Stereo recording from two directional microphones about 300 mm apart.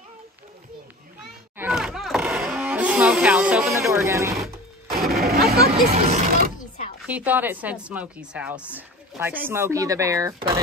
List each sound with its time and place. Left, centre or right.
1.6 s a sound: centre
5.2 s speech: right
7.1 s a woman's voice: centre